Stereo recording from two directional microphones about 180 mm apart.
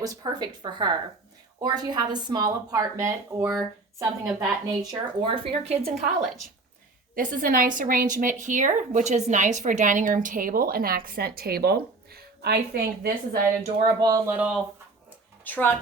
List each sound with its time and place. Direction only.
0.0 s a woman's voice: 20° right (ahead or behind)
4.6 s a woman's voice: 20° right (ahead or behind); by 6.1 s 40° right (ahead or behind)
7.2 s a woman's voice: 50° right (ahead or behind)
13.6 s a woman's voice: 20° right (ahead or behind)
14.3 s speech: 5° right (ahead or behind)
15.4 s speech: 10° left (ahead or behind)